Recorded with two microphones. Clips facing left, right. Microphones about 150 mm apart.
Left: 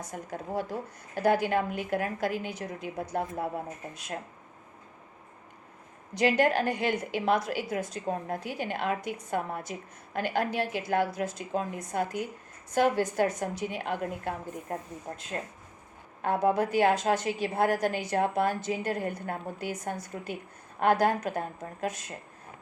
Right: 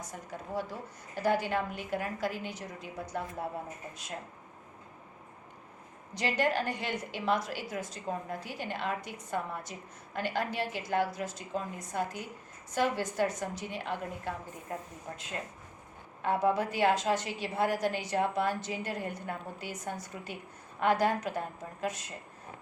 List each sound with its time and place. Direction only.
0.1 s a woman's voice: 55° left (ahead or behind)
6.1 s a woman's voice: 55° left (ahead or behind)
16.2 s a woman's voice: 50° left (ahead or behind)
21.0 s a woman's voice: 50° left (ahead or behind)